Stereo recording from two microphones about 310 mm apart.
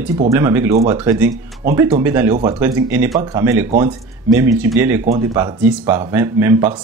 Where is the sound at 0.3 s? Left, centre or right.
Centre.